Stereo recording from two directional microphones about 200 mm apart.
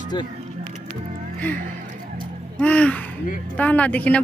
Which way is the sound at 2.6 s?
5° left (ahead or behind).